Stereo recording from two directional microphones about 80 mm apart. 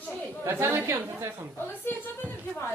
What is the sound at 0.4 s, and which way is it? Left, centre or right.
Speech, right.